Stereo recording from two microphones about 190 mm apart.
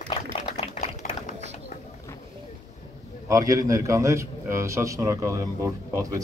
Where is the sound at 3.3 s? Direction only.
15° right (ahead or behind).